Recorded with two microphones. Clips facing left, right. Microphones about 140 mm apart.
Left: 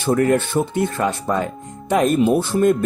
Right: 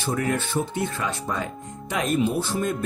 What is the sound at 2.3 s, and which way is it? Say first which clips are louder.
Speech: left 9 dB; 60° left (ahead or behind).